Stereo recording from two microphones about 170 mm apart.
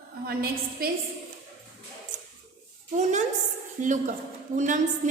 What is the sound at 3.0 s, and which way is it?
A woman's voice, 45° right (ahead or behind).